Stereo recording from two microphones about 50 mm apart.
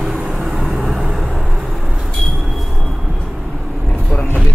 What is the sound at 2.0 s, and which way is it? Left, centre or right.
Train, centre.